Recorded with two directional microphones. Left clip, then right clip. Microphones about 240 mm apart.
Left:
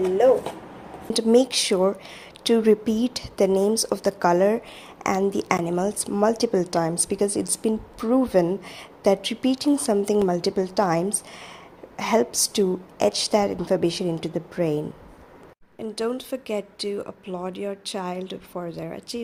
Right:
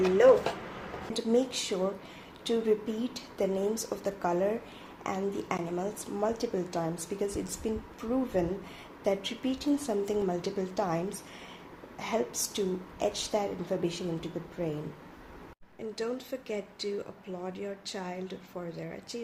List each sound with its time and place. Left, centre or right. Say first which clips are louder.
1.1 s a woman's voice: left 10 dB; left
15.8 s a woman's voice: left 7 dB; left